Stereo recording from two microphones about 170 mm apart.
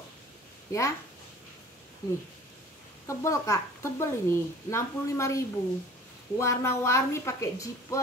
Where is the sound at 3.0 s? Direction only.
15° left (ahead or behind).